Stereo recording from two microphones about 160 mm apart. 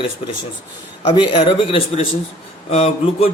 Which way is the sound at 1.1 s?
30° left (ahead or behind).